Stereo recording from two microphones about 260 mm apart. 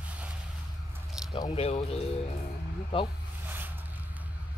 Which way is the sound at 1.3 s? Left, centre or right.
Centre.